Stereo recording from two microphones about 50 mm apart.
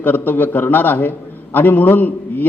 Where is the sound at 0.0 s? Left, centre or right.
Left.